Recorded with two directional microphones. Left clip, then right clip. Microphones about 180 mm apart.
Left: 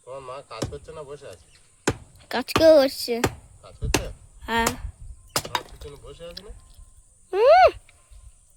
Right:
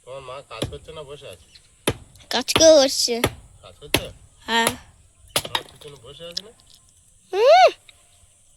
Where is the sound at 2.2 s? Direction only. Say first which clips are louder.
Right 3 dB; 5° left (ahead or behind).